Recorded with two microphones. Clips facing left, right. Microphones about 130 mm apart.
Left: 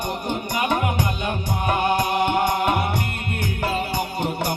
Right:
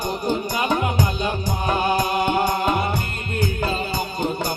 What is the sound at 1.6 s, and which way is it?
Music, 65° left (ahead or behind).